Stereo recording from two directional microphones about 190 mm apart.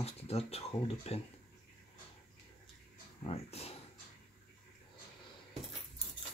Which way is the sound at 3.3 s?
35° left (ahead or behind).